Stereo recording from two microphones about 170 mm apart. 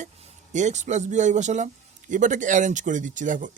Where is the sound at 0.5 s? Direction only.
45° right (ahead or behind).